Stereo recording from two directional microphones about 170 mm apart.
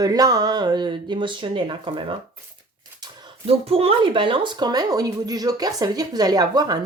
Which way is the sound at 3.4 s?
35° right (ahead or behind).